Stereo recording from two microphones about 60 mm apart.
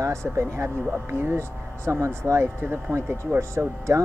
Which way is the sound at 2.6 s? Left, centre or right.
Right.